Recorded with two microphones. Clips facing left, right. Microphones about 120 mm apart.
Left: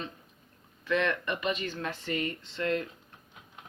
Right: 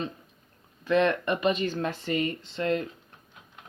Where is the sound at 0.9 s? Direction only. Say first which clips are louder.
Right 5 dB; 30° right (ahead or behind).